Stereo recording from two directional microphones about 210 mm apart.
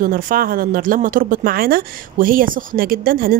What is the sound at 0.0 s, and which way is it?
Speech, 40° right (ahead or behind).